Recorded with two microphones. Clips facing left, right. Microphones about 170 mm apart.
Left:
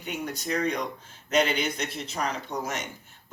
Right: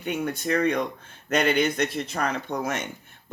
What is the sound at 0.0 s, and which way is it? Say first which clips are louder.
Speech: right 5 dB; 55° right (ahead or behind).